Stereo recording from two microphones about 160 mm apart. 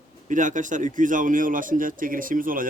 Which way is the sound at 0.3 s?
55° right (ahead or behind).